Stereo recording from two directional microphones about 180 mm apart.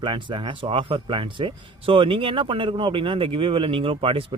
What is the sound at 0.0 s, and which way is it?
Speech, 25° right (ahead or behind).